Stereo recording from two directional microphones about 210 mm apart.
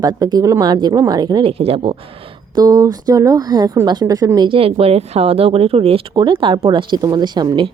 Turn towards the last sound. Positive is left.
turn(degrees=-20)  # may be behind; listen again after turning